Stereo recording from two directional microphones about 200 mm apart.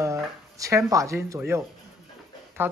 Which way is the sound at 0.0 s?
15° right (ahead or behind).